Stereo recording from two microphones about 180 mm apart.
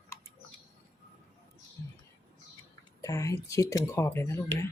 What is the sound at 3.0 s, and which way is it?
Speech, 20° left (ahead or behind).